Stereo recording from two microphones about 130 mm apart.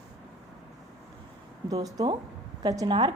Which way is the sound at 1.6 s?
30° right (ahead or behind).